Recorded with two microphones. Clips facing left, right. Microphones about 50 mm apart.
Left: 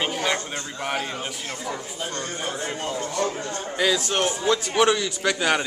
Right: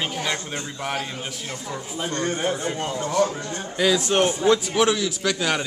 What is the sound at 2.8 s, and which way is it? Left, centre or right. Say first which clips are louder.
A man's voice: right 4 dB; right.